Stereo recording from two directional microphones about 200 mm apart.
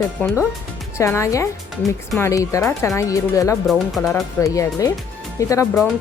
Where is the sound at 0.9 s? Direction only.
15° left (ahead or behind).